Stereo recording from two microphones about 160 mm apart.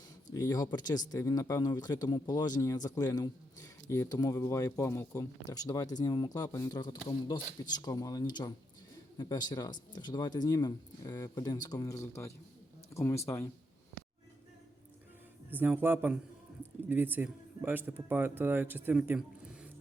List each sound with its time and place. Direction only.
0.3 s speech: 20° left (ahead or behind)
15.4 s speech: 10° right (ahead or behind)